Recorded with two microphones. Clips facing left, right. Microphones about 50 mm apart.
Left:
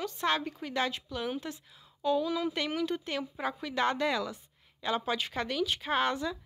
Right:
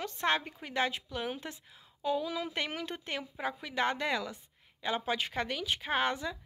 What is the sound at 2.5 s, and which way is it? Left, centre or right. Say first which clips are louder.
Speech: left 5 dB; right.